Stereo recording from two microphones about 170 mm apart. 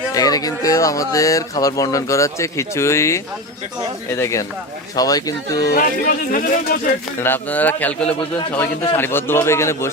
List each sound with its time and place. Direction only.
0.1 s speech: 20° left (ahead or behind)
4.2 s a man's voice: 15° left (ahead or behind)
5.7 s speech: 55° left (ahead or behind)
7.2 s a man's voice: 10° left (ahead or behind)